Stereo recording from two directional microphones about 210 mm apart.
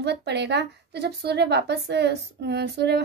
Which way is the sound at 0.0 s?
55° right (ahead or behind).